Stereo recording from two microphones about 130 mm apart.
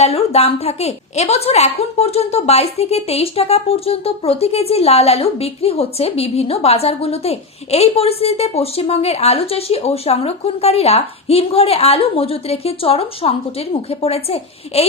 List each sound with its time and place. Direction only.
0.0 s a woman's voice: 50° left (ahead or behind)